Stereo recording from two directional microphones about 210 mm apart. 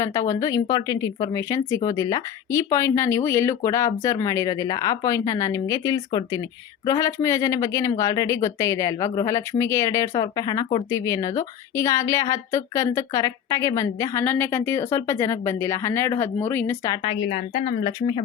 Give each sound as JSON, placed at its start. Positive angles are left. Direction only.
{"t": 0.0, "sound": "speech", "side_deg": 15}